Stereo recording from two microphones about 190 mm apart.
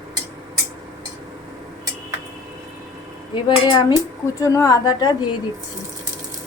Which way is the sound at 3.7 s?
25° left (ahead or behind).